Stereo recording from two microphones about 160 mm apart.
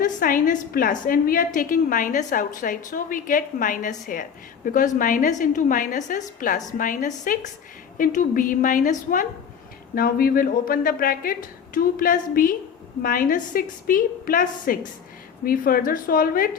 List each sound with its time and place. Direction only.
0.0 s speech: 60° left (ahead or behind)